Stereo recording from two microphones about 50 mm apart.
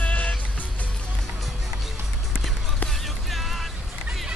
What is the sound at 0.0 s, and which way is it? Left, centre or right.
Music, left.